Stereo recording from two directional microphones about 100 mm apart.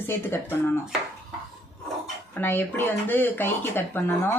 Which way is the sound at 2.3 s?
20° left (ahead or behind).